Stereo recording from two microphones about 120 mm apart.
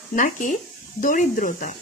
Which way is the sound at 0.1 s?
90° left.